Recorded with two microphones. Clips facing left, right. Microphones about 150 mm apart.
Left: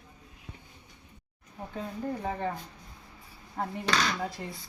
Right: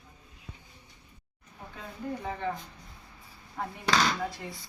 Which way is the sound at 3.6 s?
40° left (ahead or behind).